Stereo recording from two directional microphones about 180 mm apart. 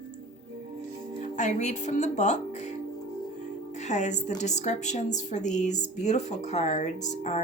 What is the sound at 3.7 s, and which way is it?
A woman's voice, 40° left (ahead or behind).